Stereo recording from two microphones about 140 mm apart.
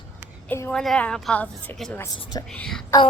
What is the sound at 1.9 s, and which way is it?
Speech, 25° left (ahead or behind).